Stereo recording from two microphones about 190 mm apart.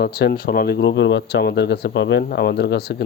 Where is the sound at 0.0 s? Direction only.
55° left (ahead or behind).